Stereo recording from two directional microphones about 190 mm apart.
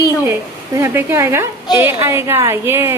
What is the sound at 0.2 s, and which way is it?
Speech, 15° right (ahead or behind).